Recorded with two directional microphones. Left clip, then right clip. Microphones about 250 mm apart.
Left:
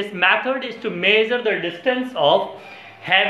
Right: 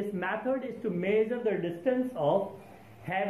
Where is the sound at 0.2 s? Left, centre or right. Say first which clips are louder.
Left 15 dB; centre.